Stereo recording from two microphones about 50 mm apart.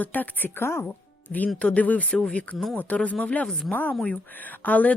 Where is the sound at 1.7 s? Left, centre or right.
Left.